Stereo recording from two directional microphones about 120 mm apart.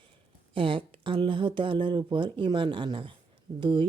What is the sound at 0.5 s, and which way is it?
Speech, 45° right (ahead or behind).